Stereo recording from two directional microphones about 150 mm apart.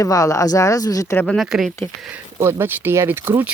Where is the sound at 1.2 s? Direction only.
5° left (ahead or behind).